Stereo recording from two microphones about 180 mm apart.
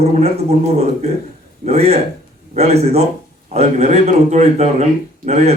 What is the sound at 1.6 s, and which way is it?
Speech, 35° right (ahead or behind).